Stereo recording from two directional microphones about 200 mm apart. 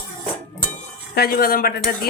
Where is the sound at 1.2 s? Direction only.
50° left (ahead or behind).